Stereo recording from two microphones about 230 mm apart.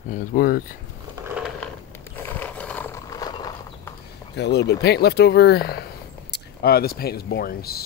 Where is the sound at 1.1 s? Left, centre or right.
Centre.